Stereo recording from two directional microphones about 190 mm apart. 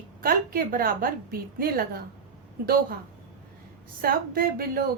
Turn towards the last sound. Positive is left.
turn(degrees=-50)  # may be behind; listen again after turning